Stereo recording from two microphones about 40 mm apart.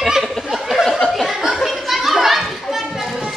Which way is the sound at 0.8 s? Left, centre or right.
Centre.